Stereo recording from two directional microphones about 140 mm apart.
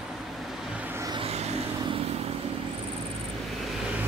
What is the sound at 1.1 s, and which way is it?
Vehicle, 45° right (ahead or behind).